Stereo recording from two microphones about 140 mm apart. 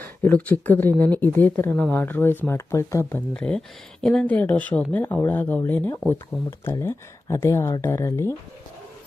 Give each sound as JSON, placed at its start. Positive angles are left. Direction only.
{"t": 0.2, "sound": "speech", "side_deg": 10}
{"t": 3.3, "sound": "speech", "side_deg": 5}